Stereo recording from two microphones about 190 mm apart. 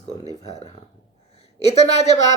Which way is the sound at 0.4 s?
35° left (ahead or behind).